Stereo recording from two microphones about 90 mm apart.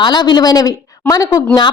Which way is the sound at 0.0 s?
55° left (ahead or behind).